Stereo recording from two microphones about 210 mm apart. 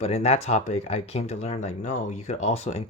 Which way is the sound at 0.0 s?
30° left (ahead or behind).